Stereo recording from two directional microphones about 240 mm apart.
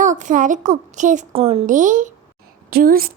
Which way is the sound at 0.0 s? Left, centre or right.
Right.